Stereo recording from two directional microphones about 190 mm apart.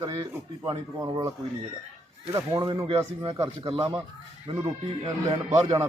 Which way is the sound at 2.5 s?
20° right (ahead or behind).